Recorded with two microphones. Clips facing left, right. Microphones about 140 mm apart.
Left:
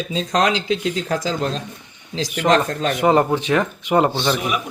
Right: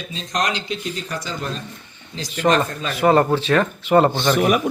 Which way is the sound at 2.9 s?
20° left (ahead or behind).